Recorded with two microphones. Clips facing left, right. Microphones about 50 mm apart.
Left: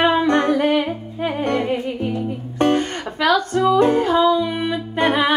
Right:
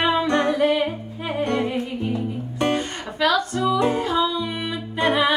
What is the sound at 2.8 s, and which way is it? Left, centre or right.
Music, left.